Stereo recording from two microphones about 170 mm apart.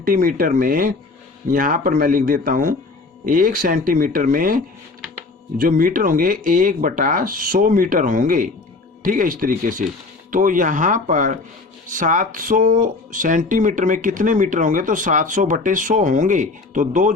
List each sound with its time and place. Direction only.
0.0 s speech: 55° right (ahead or behind)